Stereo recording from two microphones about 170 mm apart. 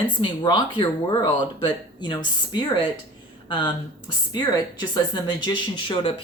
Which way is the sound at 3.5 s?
30° left (ahead or behind).